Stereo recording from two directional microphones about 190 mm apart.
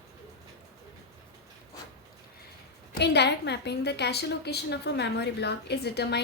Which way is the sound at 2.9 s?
60° left (ahead or behind).